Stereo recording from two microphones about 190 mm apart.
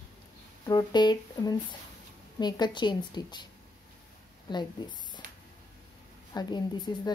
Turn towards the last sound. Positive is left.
turn(degrees=20)  # may be behind; listen again after turning